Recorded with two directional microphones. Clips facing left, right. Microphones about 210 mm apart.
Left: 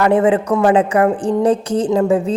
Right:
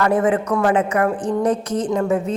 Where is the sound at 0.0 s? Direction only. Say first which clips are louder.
Left 4 dB; 25° left (ahead or behind).